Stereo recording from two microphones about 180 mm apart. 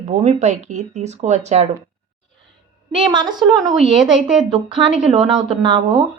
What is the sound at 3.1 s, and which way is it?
Speech, 25° right (ahead or behind).